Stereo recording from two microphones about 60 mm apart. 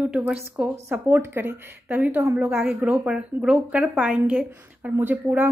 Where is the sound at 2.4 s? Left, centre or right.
Centre.